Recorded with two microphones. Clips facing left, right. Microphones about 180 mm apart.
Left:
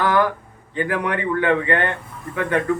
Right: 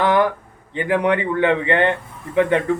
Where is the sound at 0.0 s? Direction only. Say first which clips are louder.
Right 2 dB; 20° right (ahead or behind).